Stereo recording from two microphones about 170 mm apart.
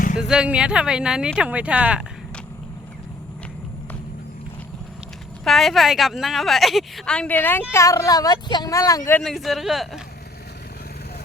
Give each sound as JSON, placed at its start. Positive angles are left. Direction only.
{"t": 0.2, "sound": "a woman's voice", "side_deg": -5}
{"t": 5.5, "sound": "a woman's voice", "side_deg": 0}
{"t": 9.2, "sound": "a woman's voice", "side_deg": 0}